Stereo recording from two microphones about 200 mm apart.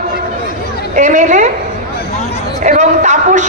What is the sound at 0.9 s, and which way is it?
Speech, 40° right (ahead or behind).